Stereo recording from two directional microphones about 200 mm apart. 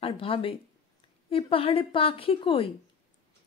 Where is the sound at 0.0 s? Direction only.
25° left (ahead or behind).